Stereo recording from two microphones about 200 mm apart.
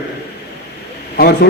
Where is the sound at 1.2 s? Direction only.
50° left (ahead or behind).